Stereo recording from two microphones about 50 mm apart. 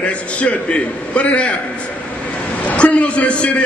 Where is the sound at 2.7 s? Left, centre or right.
Left.